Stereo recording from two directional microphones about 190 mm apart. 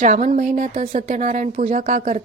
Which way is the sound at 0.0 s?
40° right (ahead or behind).